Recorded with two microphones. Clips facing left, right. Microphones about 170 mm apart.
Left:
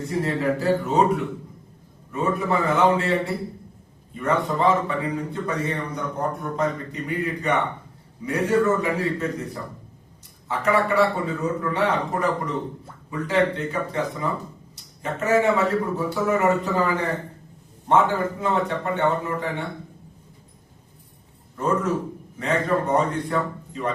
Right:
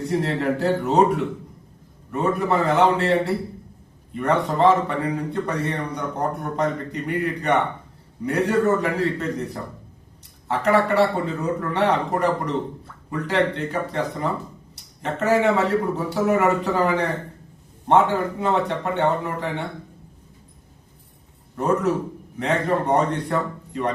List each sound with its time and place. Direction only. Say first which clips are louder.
0.0 s a man's voice: right 1 dB; 70° right (ahead or behind)
21.6 s a man's voice: right 2 dB; 65° right (ahead or behind)